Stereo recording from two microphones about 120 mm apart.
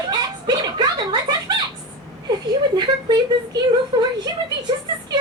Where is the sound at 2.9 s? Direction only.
35° right (ahead or behind).